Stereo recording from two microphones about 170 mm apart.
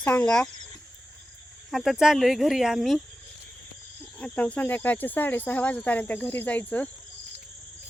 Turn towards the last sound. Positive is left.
turn(degrees=10)  # may be behind; listen again after turning